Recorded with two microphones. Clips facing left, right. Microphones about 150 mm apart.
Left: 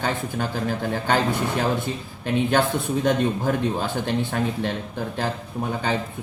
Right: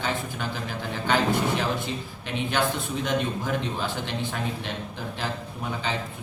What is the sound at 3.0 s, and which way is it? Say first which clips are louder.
A man's voice: left 5 dB; 50° left (ahead or behind).